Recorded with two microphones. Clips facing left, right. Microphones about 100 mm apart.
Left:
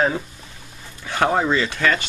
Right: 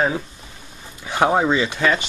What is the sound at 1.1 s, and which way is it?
Speech, 15° right (ahead or behind).